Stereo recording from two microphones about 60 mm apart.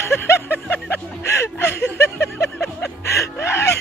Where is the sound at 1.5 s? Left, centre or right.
Left.